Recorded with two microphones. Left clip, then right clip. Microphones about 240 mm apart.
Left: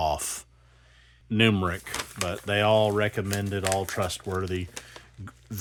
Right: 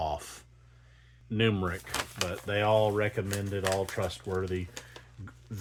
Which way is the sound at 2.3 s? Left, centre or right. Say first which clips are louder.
Left 5 dB; left.